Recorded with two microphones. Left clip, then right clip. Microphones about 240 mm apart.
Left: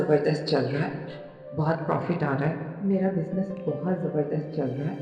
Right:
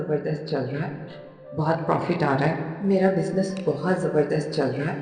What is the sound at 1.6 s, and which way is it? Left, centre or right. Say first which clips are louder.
Speech: right 3 dB; centre.